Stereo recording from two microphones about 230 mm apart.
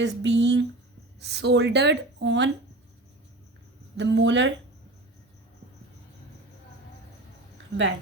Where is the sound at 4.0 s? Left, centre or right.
Right.